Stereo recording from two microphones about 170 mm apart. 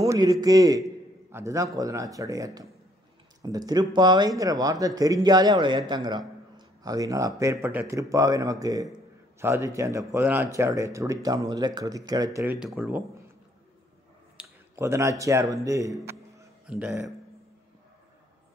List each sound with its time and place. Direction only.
0.0 s speech: 20° right (ahead or behind)
12.5 s speech: 5° right (ahead or behind)
14.4 s a sound: 5° right (ahead or behind)
14.8 s speech: 15° right (ahead or behind)
16.6 s speech: 5° right (ahead or behind)